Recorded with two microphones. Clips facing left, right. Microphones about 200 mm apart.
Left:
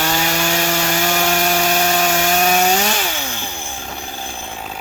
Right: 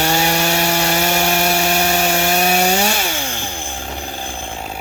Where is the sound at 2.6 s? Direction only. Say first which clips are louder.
Even; 10° right (ahead or behind).